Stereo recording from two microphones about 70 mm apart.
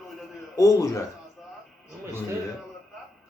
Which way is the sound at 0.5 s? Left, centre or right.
Left.